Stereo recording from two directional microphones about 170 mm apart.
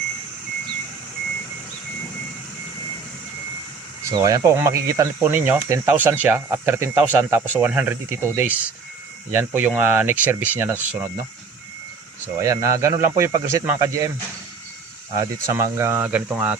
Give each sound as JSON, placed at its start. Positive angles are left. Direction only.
{"t": 4.0, "sound": "speech", "side_deg": -20}
{"t": 12.4, "sound": "speech", "side_deg": -20}
{"t": 15.1, "sound": "speech", "side_deg": -20}